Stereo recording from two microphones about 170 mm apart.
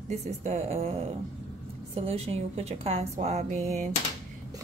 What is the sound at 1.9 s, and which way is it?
Speech, 35° right (ahead or behind).